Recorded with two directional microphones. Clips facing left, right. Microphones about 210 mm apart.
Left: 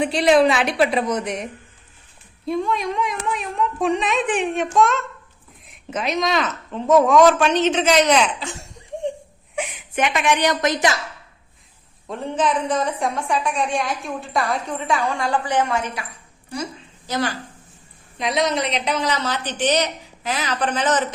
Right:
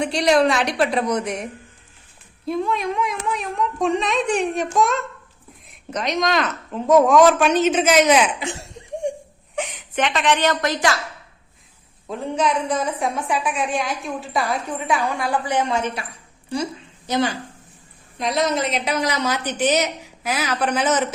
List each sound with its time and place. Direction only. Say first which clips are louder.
0.0 s a woman's voice: left 2 dB; 5° left (ahead or behind)
2.5 s a woman's voice: even; centre (ahead or behind)
9.0 s whimper: right 1 dB; 15° right (ahead or behind)
9.6 s a woman's voice: even; 10° left (ahead or behind)
12.0 s a woman's voice: even; centre (ahead or behind)
17.1 s speech: right 3 dB; 20° right (ahead or behind)
18.2 s a woman's voice: even; centre (ahead or behind)